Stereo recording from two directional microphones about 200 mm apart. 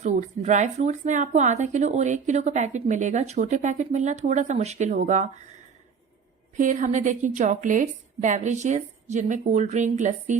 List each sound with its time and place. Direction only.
0.0 s speech: 35° right (ahead or behind)
6.6 s speech: 40° right (ahead or behind)